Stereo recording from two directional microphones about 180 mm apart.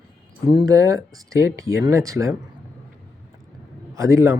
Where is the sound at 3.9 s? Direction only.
15° right (ahead or behind).